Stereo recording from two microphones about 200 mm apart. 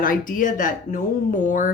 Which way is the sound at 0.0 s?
45° left (ahead or behind).